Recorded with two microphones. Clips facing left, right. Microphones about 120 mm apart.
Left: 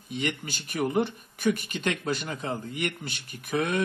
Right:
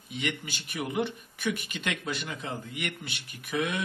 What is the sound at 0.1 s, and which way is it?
Speech, 40° left (ahead or behind).